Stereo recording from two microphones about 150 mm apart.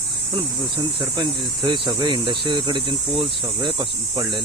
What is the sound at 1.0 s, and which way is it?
Cricket, 30° right (ahead or behind).